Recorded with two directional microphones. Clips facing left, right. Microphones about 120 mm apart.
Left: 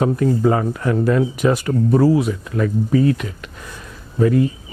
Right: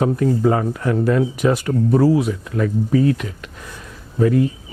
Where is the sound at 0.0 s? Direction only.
15° left (ahead or behind).